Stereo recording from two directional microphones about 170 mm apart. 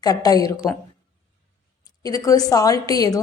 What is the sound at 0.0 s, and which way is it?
Speech, 20° left (ahead or behind).